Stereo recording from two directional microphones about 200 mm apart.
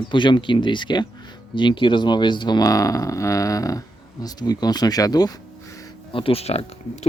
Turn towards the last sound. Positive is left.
turn(degrees=30)  # may be behind; listen again after turning